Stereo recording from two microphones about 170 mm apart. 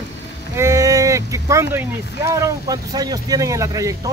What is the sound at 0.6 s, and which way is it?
Speech, 20° right (ahead or behind).